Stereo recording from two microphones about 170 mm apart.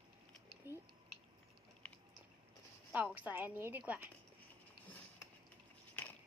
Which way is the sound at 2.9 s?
10° right (ahead or behind).